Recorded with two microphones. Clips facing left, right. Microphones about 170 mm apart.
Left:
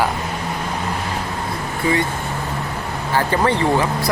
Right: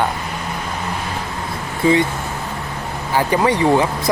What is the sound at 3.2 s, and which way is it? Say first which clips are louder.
Speech: right 2 dB; 10° right (ahead or behind).